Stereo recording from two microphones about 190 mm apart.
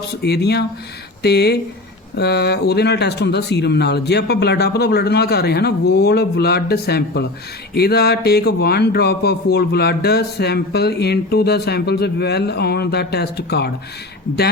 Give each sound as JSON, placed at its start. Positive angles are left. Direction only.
{"t": 0.1, "sound": "speech", "side_deg": 60}